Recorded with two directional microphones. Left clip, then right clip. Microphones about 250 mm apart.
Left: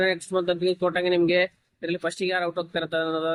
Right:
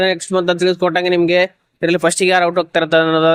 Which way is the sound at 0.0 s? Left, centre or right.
Right.